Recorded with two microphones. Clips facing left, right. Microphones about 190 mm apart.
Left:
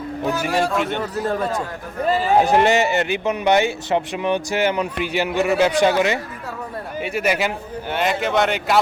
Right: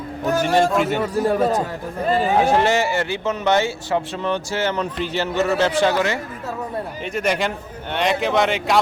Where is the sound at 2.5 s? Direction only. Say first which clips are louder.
Left 2 dB; 20° left (ahead or behind).